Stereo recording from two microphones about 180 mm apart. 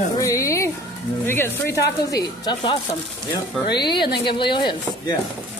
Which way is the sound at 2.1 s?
25° left (ahead or behind).